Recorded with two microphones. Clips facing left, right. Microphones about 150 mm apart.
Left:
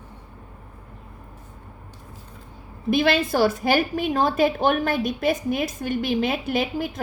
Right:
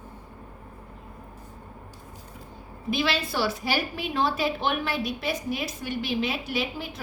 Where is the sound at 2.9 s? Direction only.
50° left (ahead or behind).